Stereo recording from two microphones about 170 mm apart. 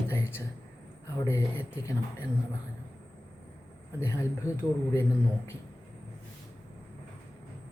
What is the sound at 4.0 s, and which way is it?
Speech, 15° left (ahead or behind).